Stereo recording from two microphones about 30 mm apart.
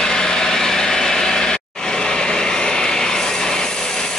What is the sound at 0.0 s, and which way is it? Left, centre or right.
Vehicle, left.